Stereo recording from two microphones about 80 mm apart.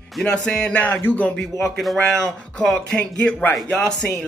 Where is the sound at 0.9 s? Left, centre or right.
Left.